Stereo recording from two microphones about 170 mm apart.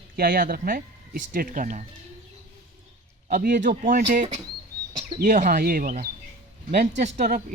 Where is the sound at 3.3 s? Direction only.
55° right (ahead or behind).